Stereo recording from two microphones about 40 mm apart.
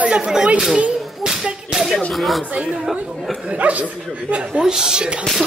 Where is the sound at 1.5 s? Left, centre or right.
Centre.